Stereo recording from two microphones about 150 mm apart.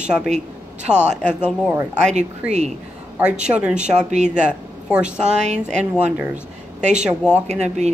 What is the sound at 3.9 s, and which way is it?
A woman's voice, 50° right (ahead or behind).